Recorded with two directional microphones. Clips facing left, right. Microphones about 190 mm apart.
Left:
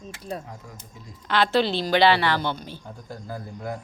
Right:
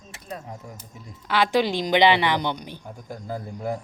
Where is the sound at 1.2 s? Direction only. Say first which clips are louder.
Even; 10° right (ahead or behind).